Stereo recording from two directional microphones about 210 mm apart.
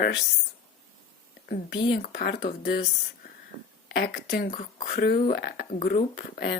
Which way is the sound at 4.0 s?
45° left (ahead or behind).